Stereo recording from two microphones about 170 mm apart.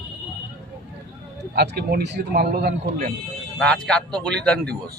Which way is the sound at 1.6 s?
70° right (ahead or behind).